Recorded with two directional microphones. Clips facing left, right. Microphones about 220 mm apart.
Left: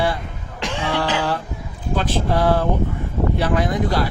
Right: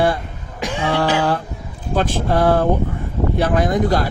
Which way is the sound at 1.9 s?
50° right (ahead or behind).